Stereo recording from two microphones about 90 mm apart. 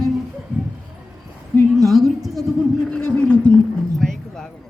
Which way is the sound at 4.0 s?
5° left (ahead or behind).